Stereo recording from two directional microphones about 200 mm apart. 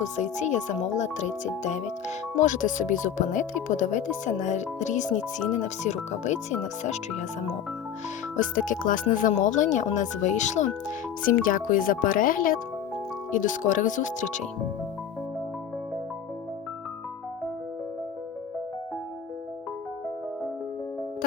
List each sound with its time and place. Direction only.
0.0 s speech: 35° left (ahead or behind)
8.4 s speech: 40° left (ahead or behind)